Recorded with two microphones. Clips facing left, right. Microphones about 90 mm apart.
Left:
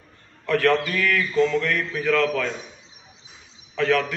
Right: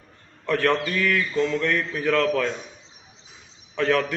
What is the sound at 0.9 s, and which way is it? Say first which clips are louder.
A man's voice: even; 25° right (ahead or behind).